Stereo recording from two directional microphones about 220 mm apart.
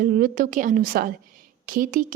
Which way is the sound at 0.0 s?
40° right (ahead or behind).